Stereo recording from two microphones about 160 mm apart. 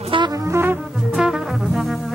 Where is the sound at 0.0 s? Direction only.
30° right (ahead or behind).